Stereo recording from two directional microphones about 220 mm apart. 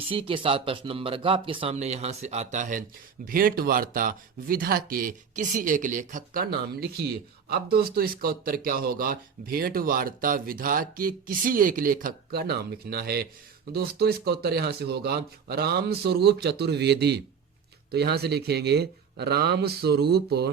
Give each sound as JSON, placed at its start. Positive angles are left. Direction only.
{"t": 0.0, "sound": "speech", "side_deg": -25}